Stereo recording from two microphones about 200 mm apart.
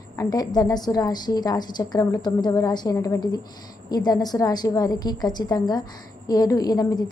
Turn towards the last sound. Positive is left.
turn(degrees=20)  # may be behind; listen again after turning